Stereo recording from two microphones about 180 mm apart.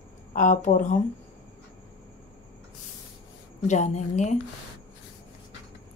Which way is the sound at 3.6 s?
40° left (ahead or behind).